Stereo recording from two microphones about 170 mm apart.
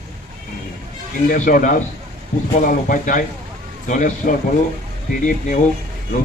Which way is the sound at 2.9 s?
55° left (ahead or behind).